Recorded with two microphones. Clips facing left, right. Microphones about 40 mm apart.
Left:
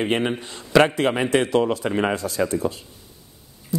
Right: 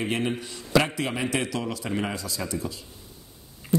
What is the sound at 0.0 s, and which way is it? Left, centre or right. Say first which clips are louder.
Speech: left 5 dB; left.